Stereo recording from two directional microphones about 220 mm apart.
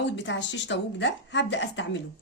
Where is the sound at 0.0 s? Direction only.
55° left (ahead or behind).